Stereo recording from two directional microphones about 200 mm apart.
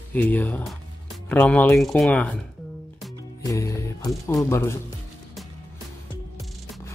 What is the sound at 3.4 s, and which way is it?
Speech, 15° left (ahead or behind).